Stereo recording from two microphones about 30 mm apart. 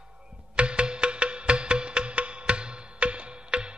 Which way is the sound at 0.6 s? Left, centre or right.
Right.